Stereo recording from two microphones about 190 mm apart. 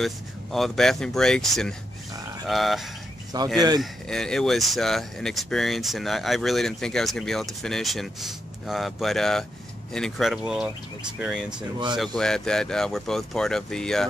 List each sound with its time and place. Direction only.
0.0 s speech: centre (ahead or behind)
3.5 s speech: 20° right (ahead or behind)
3.8 s speech: centre (ahead or behind)